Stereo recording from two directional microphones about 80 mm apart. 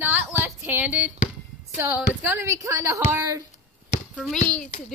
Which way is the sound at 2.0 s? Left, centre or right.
Right.